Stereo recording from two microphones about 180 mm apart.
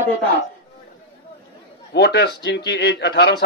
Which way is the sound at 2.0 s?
65° left (ahead or behind).